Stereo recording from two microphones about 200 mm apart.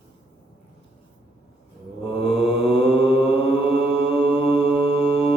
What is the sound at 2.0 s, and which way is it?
Mantra, 25° left (ahead or behind).